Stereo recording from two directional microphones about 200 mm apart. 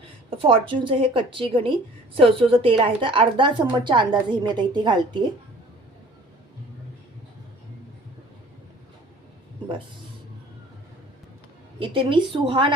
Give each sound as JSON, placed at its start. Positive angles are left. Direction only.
{"t": 0.3, "sound": "a woman's voice", "side_deg": -25}
{"t": 11.8, "sound": "a woman's voice", "side_deg": -25}